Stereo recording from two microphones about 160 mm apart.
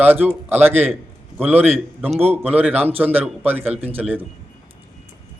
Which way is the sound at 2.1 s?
40° right (ahead or behind).